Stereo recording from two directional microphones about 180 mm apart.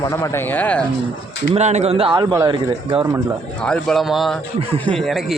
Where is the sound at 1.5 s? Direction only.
40° right (ahead or behind).